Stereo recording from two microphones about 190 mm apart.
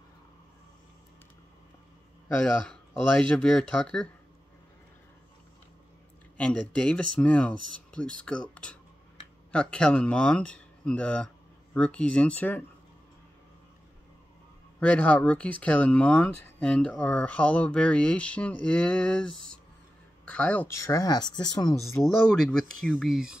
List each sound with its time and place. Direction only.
2.4 s speech: 5° left (ahead or behind)
6.3 s speech: 5° left (ahead or behind)
14.8 s speech: 5° left (ahead or behind)
22.0 s speech: 5° left (ahead or behind)